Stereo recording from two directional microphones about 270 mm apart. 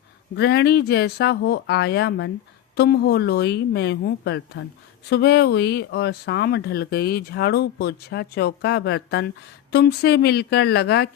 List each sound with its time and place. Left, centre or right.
0.3 s speech: left